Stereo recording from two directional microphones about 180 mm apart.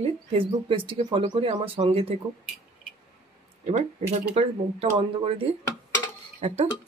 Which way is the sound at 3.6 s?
40° right (ahead or behind).